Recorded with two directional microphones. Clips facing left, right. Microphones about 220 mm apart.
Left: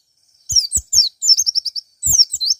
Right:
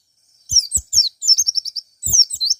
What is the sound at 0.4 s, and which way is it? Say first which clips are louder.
Bird: left 1 dB; 20° left (ahead or behind).